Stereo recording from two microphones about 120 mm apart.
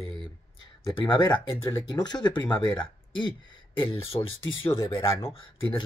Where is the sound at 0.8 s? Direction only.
35° left (ahead or behind).